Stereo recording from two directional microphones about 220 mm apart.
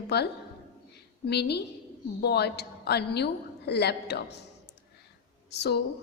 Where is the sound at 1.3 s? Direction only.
50° left (ahead or behind).